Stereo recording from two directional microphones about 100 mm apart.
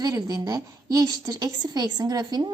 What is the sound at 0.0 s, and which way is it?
A woman's voice, 40° right (ahead or behind).